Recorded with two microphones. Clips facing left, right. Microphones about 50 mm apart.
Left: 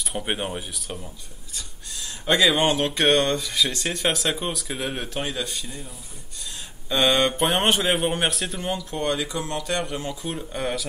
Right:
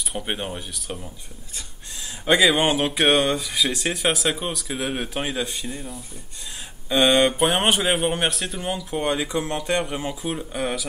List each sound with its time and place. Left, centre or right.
0.1 s speech: centre
2.2 s speech: centre
5.0 s speech: centre
6.9 s speech: centre
8.9 s speech: centre